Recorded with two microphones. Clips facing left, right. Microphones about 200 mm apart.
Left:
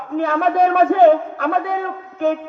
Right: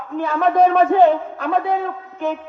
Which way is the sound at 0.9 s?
60° left (ahead or behind).